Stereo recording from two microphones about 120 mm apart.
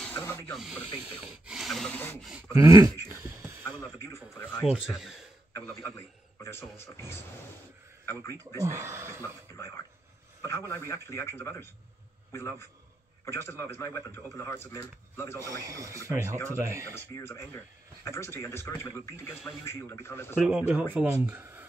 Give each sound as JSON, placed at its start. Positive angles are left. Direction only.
{"t": 0.2, "sound": "rub", "side_deg": 20}
{"t": 0.5, "sound": "speech", "side_deg": -5}
{"t": 0.9, "sound": "speech", "side_deg": -15}
{"t": 2.5, "sound": "speech", "side_deg": -30}
{"t": 4.0, "sound": "speech", "side_deg": 20}
{"t": 4.8, "sound": "speech", "side_deg": -5}
{"t": 5.5, "sound": "a man's voice", "side_deg": 20}
{"t": 8.6, "sound": "speech", "side_deg": -25}
{"t": 10.4, "sound": "speech", "side_deg": 25}
{"t": 15.4, "sound": "speech", "side_deg": -25}
{"t": 17.2, "sound": "speech", "side_deg": 20}
{"t": 20.3, "sound": "speech", "side_deg": -10}